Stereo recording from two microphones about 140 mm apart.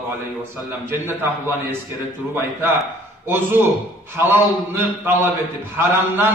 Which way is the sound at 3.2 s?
15° right (ahead or behind).